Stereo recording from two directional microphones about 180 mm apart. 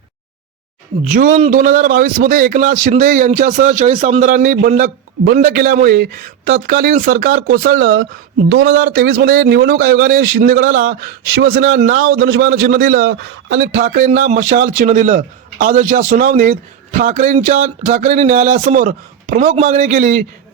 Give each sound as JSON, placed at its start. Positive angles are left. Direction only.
{"t": 1.0, "sound": "speech", "side_deg": -45}
{"t": 9.5, "sound": "speech", "side_deg": -60}
{"t": 13.7, "sound": "speech", "side_deg": -50}